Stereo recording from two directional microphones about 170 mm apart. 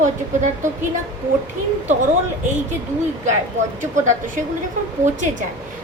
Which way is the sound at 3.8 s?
50° right (ahead or behind).